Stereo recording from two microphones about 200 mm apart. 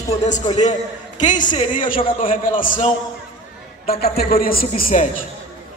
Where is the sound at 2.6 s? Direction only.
40° left (ahead or behind).